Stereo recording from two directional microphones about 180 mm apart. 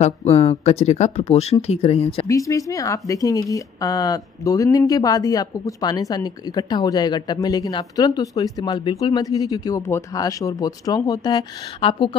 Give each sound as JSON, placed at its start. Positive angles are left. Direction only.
{"t": 0.0, "sound": "speech", "side_deg": 35}
{"t": 2.2, "sound": "speech", "side_deg": 20}